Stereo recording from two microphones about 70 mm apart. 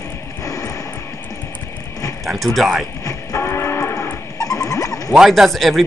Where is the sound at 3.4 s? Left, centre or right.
Left.